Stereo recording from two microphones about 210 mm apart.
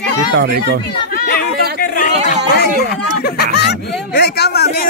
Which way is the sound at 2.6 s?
50° left (ahead or behind).